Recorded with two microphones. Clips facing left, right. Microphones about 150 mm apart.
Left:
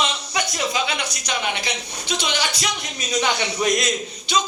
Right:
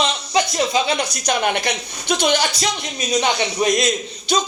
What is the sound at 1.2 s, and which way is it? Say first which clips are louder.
A woman's voice: right 7 dB; 55° right (ahead or behind).